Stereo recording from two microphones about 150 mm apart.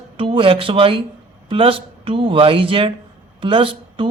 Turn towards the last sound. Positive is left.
turn(degrees=-35)  # may be behind; listen again after turning